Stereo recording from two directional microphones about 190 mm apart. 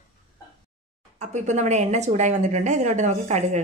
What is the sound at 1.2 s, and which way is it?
Speech, 40° right (ahead or behind).